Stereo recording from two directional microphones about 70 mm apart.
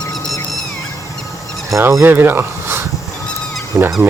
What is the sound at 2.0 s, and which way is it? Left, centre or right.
Speech, right.